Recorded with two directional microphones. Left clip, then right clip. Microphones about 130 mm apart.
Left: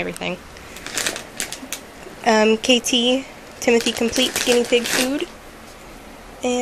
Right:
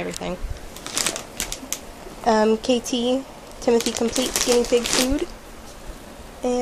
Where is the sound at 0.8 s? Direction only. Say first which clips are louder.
Left 1 dB; 35° right (ahead or behind).